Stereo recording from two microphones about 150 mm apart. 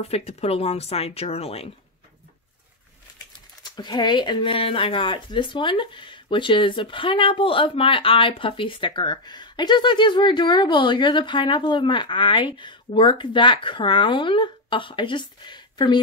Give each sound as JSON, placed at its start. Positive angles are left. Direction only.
{"t": 0.0, "sound": "speech", "side_deg": 45}
{"t": 3.7, "sound": "speech", "side_deg": 30}